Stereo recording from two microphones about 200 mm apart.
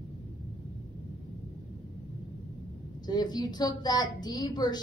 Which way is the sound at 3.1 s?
20° left (ahead or behind).